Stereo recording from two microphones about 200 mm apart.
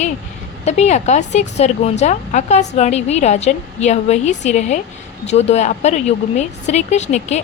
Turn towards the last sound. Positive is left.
turn(degrees=35)  # may be behind; listen again after turning